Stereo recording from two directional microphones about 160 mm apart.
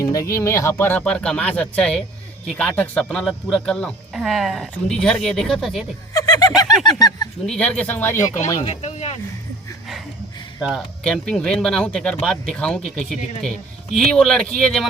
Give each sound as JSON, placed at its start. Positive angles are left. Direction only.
{"t": 0.0, "sound": "speech", "side_deg": 20}
{"t": 6.1, "sound": "a sound", "side_deg": 25}
{"t": 6.8, "sound": "speech", "side_deg": 25}
{"t": 7.4, "sound": "speech", "side_deg": 5}
{"t": 8.6, "sound": "speech", "side_deg": 40}
{"t": 10.6, "sound": "speech", "side_deg": 0}